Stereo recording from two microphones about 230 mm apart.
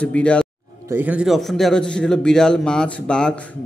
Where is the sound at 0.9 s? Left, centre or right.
Centre.